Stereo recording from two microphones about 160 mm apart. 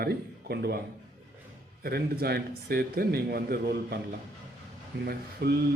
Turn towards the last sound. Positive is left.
turn(degrees=-75)  # may be behind; listen again after turning